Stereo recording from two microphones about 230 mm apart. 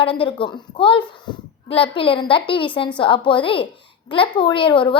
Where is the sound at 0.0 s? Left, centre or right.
Left.